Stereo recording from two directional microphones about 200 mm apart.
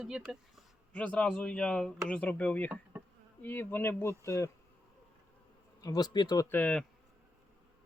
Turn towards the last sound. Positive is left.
turn(degrees=5)  # may be behind; listen again after turning